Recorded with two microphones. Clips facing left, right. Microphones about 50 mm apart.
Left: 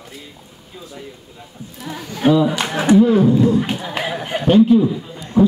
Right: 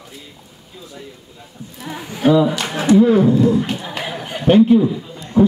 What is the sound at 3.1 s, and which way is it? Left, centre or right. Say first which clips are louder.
Speech: right 1 dB; right.